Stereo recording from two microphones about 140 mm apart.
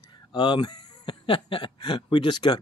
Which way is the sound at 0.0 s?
35° left (ahead or behind).